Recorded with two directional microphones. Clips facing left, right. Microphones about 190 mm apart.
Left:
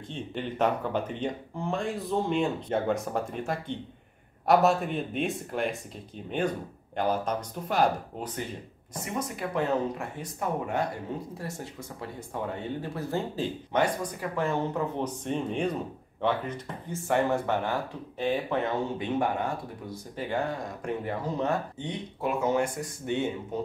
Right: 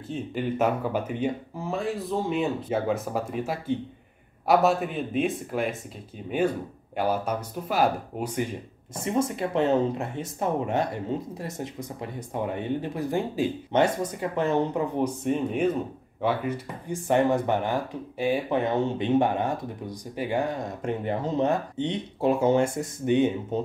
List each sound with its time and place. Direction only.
0.1 s speech: 5° right (ahead or behind)
7.0 s speech: 10° right (ahead or behind)
9.0 s speech: 25° right (ahead or behind)